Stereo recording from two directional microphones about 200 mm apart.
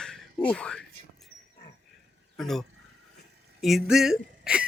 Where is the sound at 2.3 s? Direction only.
Centre (ahead or behind).